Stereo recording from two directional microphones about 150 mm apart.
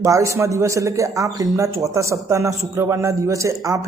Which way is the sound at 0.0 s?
20° right (ahead or behind).